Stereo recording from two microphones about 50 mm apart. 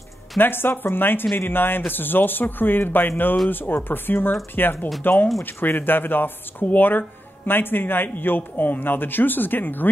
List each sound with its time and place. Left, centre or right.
0.4 s speech: left